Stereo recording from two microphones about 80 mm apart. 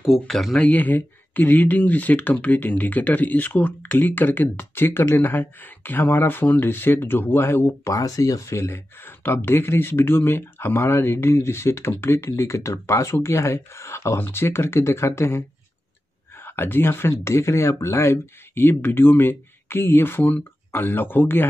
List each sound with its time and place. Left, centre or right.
0.0 s speech: centre
0.6 s speech: centre
16.4 s speech: left